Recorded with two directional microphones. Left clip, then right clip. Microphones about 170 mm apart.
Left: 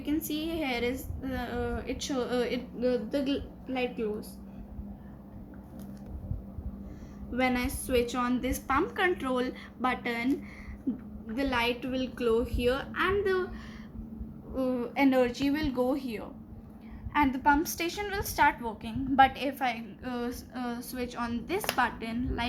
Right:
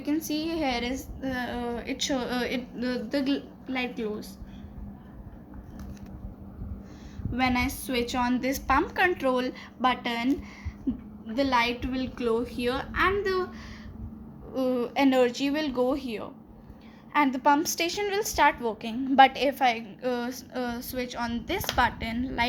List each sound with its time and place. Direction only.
0.3 s a woman's voice: 35° right (ahead or behind)
7.3 s a woman's voice: 40° right (ahead or behind)
11.3 s a woman's voice: 35° right (ahead or behind)
14.5 s a woman's voice: 40° right (ahead or behind)